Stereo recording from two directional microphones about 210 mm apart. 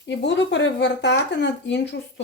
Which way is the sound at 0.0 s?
55° left (ahead or behind).